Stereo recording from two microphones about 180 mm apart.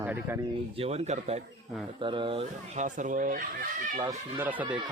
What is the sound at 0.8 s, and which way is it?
Speech, 35° right (ahead or behind).